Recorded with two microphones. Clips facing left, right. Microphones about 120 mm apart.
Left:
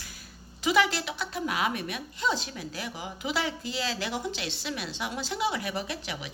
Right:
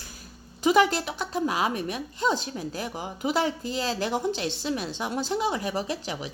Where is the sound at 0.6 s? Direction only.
45° right (ahead or behind).